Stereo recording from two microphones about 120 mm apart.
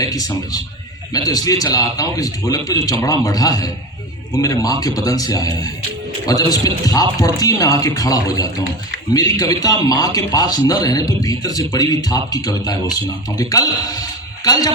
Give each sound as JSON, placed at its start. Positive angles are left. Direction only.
{"t": 0.0, "sound": "a man's voice", "side_deg": 30}